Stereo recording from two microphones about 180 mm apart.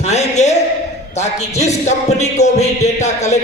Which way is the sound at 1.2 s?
40° left (ahead or behind).